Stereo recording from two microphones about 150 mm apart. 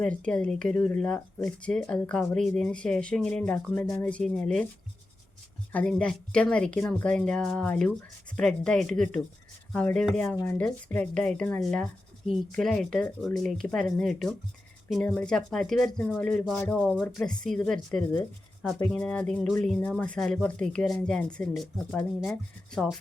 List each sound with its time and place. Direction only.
0.0 s speech: 10° left (ahead or behind)
5.7 s speech: 5° left (ahead or behind)